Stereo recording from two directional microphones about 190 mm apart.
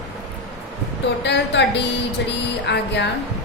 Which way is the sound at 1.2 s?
65° left (ahead or behind).